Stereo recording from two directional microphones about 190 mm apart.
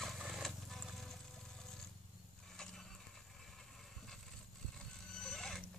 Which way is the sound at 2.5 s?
5° left (ahead or behind).